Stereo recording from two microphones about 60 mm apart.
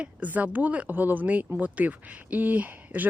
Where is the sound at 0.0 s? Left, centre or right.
Right.